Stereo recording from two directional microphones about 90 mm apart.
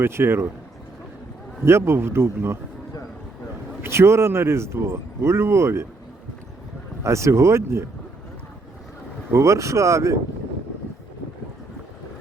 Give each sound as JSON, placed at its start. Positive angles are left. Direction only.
{"t": 0.0, "sound": "speech", "side_deg": -25}
{"t": 1.6, "sound": "speech", "side_deg": -30}
{"t": 3.8, "sound": "speech", "side_deg": -30}
{"t": 7.0, "sound": "speech", "side_deg": -35}
{"t": 9.3, "sound": "speech", "side_deg": -35}